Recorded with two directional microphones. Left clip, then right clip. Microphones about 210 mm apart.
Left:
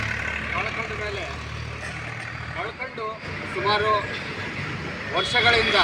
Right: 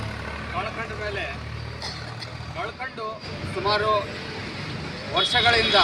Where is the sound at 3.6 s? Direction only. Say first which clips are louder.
Even; 10° right (ahead or behind).